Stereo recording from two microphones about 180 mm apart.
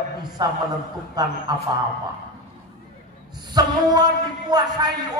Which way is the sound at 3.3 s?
25° right (ahead or behind).